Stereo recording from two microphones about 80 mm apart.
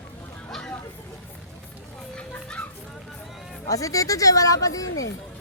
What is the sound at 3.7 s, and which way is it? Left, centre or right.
Speech, left.